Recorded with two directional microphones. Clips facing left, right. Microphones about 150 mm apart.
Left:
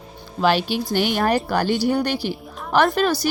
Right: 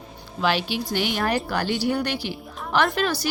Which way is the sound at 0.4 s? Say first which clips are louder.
Left 4 dB; 45° left (ahead or behind).